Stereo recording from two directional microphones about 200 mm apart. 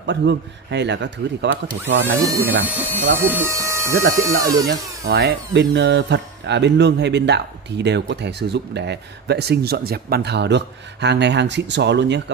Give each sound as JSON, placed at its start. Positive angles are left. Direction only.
{"t": 0.0, "sound": "speech", "side_deg": -60}
{"t": 2.1, "sound": "speech", "side_deg": -15}
{"t": 5.0, "sound": "speech", "side_deg": -50}